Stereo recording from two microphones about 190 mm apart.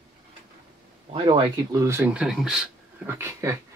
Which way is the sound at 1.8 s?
10° right (ahead or behind).